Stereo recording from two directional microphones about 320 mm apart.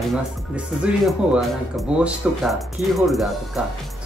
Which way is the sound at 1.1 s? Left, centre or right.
Centre.